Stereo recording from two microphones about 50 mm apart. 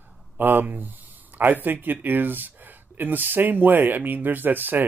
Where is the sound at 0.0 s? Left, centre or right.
Right.